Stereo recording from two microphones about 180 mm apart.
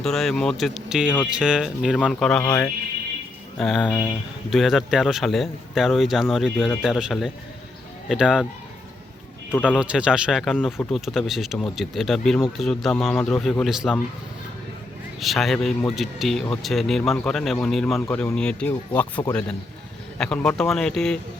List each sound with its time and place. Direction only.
0.0 s a man's voice: centre (ahead or behind)
2.4 s speech: 15° left (ahead or behind)
3.6 s a man's voice: centre (ahead or behind)
9.5 s a man's voice: 5° left (ahead or behind)
9.7 s a man's voice: 5° right (ahead or behind)
13.1 s a man's voice: 10° left (ahead or behind)
15.2 s a man's voice: centre (ahead or behind)